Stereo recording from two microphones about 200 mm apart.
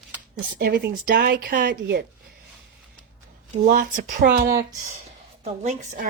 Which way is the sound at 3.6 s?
45° right (ahead or behind).